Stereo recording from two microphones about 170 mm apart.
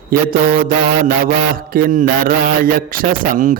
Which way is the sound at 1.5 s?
60° right (ahead or behind).